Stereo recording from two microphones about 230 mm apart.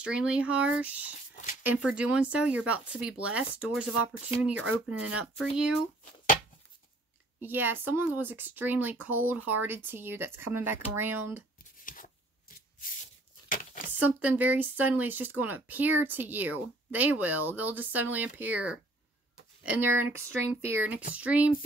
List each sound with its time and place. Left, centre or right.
0.0 s speech: centre
1.3 s zipper: left
1.6 s speech: centre
7.4 s speech: centre
11.8 s a sound: left
14.0 s speech: centre